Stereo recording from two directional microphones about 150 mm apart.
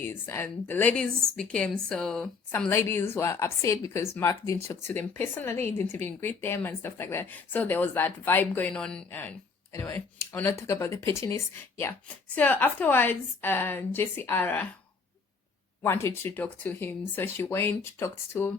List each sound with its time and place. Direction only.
0.0 s a woman's voice: 15° left (ahead or behind)
15.8 s a woman's voice: 15° left (ahead or behind)